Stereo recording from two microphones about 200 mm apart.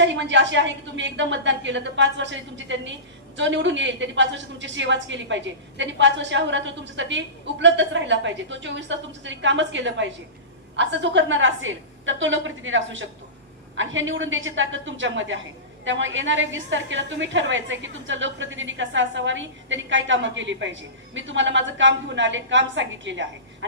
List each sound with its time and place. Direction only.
0.0 s a woman's voice: 65° right (ahead or behind)